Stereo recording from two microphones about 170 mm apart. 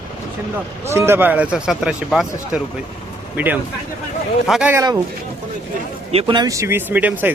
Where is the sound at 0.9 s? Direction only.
15° right (ahead or behind).